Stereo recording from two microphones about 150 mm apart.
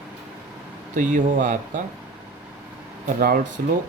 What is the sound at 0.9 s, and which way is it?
Speech, 55° right (ahead or behind).